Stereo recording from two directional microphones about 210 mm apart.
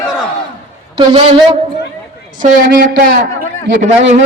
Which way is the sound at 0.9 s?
25° right (ahead or behind).